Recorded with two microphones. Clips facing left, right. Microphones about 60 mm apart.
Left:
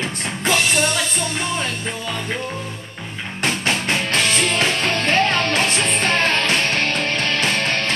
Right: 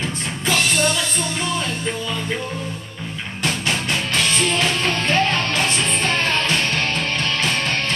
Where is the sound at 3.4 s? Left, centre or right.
Left.